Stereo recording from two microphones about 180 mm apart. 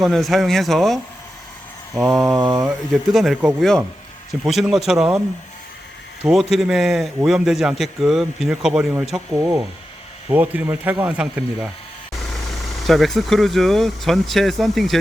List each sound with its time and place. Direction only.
0.0 s speech: centre (ahead or behind)
2.1 s speech: centre (ahead or behind)
6.5 s speech: centre (ahead or behind)
9.4 s speech: 15° right (ahead or behind)
12.9 s speech: centre (ahead or behind)